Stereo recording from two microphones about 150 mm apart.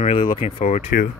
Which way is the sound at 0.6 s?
55° left (ahead or behind).